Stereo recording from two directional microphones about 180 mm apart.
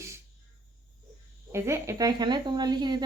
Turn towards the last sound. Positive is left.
turn(degrees=-25)  # may be behind; listen again after turning